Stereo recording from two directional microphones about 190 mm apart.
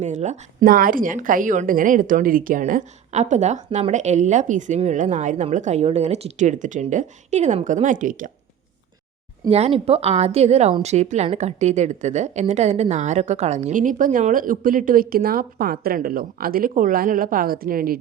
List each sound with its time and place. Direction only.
0.0 s a woman's voice: 40° right (ahead or behind)
9.5 s a woman's voice: 30° right (ahead or behind); by 18.0 s 50° right (ahead or behind)